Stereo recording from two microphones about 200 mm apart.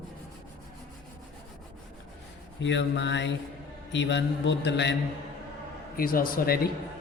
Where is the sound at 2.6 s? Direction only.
65° left (ahead or behind).